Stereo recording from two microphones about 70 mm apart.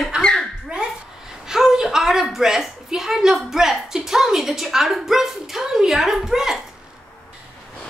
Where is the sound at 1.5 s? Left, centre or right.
Centre.